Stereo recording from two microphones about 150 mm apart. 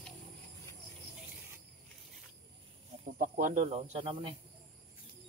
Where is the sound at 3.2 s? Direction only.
60° right (ahead or behind); by 4.4 s 35° right (ahead or behind).